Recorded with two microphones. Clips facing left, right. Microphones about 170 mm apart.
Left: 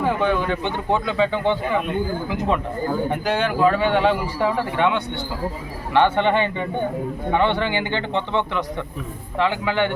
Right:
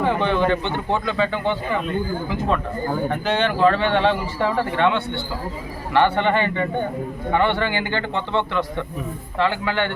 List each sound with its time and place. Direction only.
0.0 s speech: 5° left (ahead or behind)
3.1 s speech: 10° left (ahead or behind)